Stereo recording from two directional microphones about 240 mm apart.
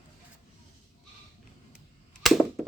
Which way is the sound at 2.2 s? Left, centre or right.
Centre.